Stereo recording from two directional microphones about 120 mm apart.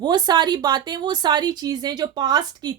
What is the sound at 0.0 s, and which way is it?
Speech, 35° right (ahead or behind).